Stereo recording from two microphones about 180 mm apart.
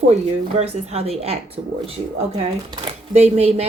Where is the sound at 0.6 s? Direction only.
35° right (ahead or behind).